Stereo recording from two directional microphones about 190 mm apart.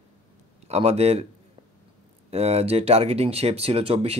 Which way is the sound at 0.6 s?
35° right (ahead or behind).